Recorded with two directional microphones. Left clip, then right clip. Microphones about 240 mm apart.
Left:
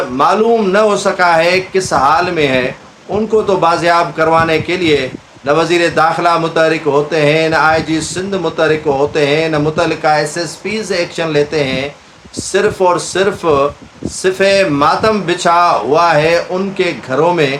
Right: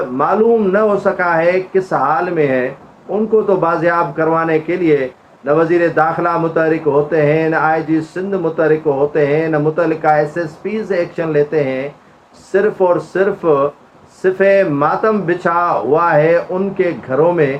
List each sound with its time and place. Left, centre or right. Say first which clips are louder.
0.2 s speech: left 2 dB; left